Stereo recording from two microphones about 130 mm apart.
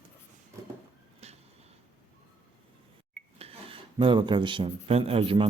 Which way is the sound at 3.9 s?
40° right (ahead or behind).